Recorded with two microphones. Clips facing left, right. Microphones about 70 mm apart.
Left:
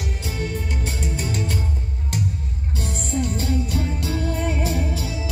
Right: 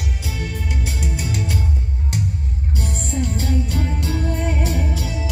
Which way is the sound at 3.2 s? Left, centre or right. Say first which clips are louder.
Right 3 dB; right.